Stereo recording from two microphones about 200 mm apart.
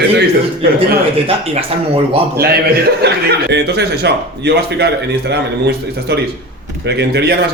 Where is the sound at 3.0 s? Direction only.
55° right (ahead or behind).